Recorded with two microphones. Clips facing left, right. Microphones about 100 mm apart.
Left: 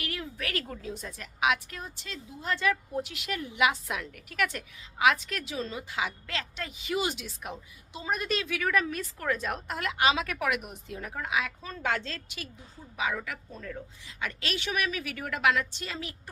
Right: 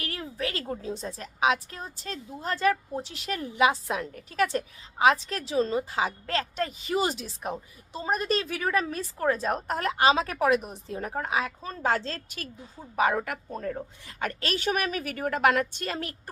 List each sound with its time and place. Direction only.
0.0 s a woman's voice: 35° right (ahead or behind)
13.0 s a woman's voice: 50° right (ahead or behind)